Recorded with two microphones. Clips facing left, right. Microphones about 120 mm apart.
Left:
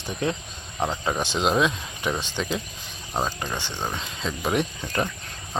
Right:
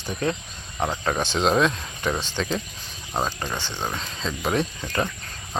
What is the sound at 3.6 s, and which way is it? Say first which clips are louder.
Speech: right 1 dB; 15° left (ahead or behind).